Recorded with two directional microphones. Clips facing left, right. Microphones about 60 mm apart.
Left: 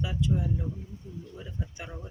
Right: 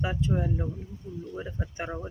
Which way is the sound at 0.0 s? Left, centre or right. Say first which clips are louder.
Right 2 dB; right.